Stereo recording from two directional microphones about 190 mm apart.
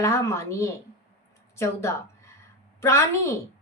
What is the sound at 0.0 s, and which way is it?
A woman's voice, 15° left (ahead or behind).